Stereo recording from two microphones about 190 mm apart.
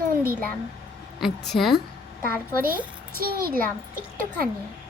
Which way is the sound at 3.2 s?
50° right (ahead or behind).